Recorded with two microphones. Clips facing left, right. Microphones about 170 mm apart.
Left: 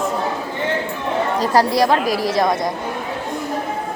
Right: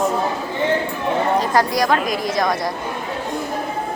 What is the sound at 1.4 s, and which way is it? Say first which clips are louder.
A woman's voice: left 2 dB; 30° left (ahead or behind).